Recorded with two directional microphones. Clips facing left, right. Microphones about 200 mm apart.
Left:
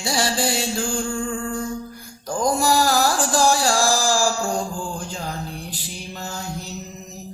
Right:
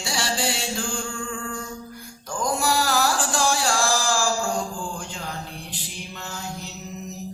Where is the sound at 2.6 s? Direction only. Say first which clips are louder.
Left 3 dB; 40° left (ahead or behind).